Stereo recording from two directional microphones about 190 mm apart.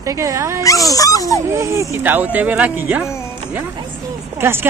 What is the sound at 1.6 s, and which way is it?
Speech, 10° right (ahead or behind).